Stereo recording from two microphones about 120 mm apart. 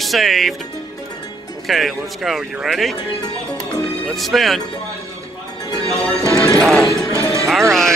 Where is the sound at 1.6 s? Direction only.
Centre (ahead or behind).